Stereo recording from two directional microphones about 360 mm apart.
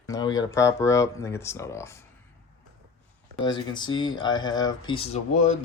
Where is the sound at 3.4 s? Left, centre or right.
Centre.